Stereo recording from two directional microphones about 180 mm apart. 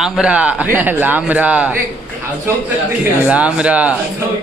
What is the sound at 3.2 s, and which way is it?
Speech, 5° right (ahead or behind).